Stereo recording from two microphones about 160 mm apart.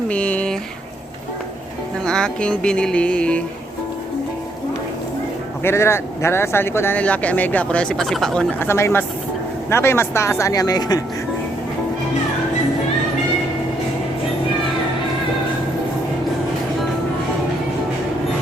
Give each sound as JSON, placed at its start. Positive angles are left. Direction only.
{"t": 0.1, "sound": "a sound", "side_deg": 10}
{"t": 2.0, "sound": "speech", "side_deg": 5}
{"t": 5.6, "sound": "speech", "side_deg": 15}